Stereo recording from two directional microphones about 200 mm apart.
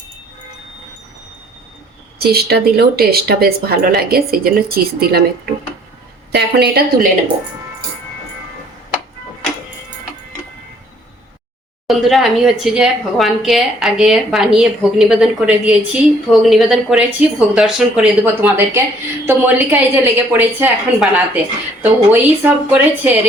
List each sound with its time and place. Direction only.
2.1 s speech: 50° right (ahead or behind)
6.3 s speech: 55° right (ahead or behind)
11.9 s a woman's voice: centre (ahead or behind)